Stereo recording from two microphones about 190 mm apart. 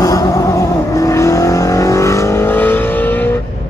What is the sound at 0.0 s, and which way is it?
Vehicle, 20° left (ahead or behind).